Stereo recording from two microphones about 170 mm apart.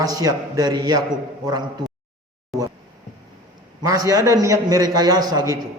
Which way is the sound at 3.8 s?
20° right (ahead or behind).